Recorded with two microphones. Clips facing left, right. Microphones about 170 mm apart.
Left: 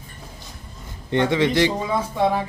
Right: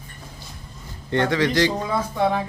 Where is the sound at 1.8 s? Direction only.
Centre (ahead or behind).